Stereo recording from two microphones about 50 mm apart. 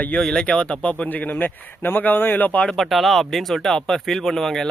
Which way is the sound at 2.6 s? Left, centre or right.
Centre.